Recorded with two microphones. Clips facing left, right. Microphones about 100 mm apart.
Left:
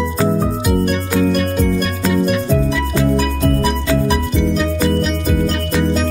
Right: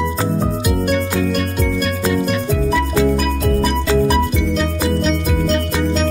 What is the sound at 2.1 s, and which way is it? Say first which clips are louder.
Music: left 6 dB; centre (ahead or behind).